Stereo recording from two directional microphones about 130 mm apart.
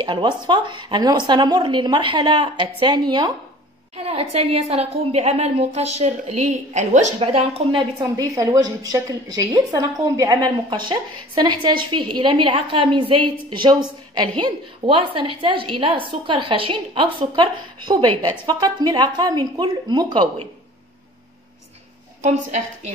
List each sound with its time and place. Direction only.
0.0 s a woman's voice: 35° right (ahead or behind)
3.9 s a woman's voice: 50° right (ahead or behind); by 7.1 s 65° right (ahead or behind)
7.2 s speech: 45° right (ahead or behind)
8.0 s a woman's voice: 25° right (ahead or behind)